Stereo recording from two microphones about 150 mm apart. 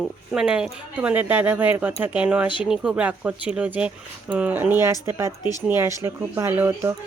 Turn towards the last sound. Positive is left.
turn(degrees=-15)  # may be behind; listen again after turning